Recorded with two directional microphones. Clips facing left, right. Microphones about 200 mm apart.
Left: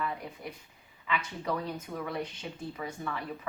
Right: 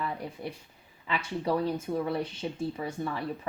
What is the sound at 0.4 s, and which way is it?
Speech, 30° right (ahead or behind).